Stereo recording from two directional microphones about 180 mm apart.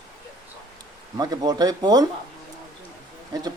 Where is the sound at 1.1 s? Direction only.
20° right (ahead or behind).